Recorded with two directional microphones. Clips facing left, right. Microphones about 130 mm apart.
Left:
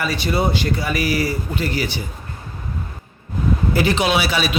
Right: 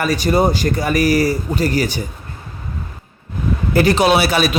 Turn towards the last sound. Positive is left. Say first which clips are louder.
# right 5 dB
turn(degrees=-45)  # may be behind; listen again after turning